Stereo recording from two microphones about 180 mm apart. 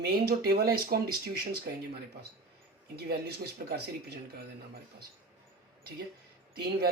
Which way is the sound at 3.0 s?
60° right (ahead or behind).